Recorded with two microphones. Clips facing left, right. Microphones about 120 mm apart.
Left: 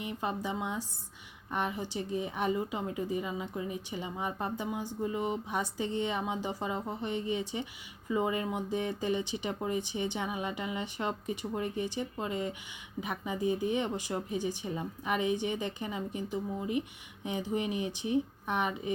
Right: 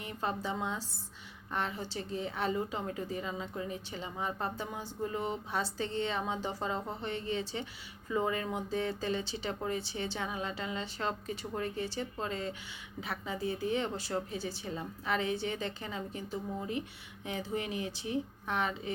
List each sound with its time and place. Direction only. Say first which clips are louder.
0.0 s a woman's voice: left 1 dB; 15° left (ahead or behind)